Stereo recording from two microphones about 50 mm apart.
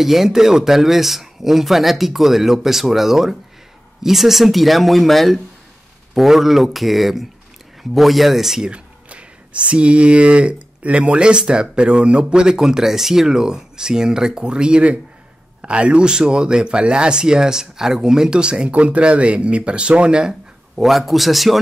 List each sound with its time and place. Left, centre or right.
0.0 s speech: centre
8.7 s speech: right
20.7 s speech: centre